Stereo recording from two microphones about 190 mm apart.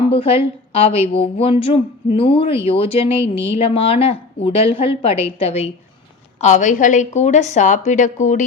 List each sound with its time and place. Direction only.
0.1 s a woman's voice: 30° left (ahead or behind)